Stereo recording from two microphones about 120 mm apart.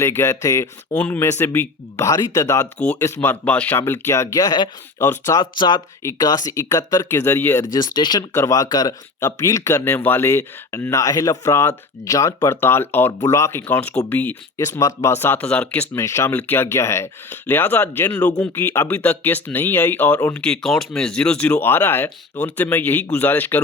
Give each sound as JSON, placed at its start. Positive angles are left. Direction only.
{"t": 0.0, "sound": "speech", "side_deg": 20}
{"t": 0.9, "sound": "speech", "side_deg": 15}
{"t": 3.0, "sound": "speech", "side_deg": 15}
{"t": 4.9, "sound": "speech", "side_deg": 25}
{"t": 5.4, "sound": "speech", "side_deg": 40}
{"t": 6.0, "sound": "speech", "side_deg": 25}
{"t": 7.6, "sound": "speech", "side_deg": 35}
{"t": 14.6, "sound": "speech", "side_deg": 30}
{"t": 16.0, "sound": "speech", "side_deg": 25}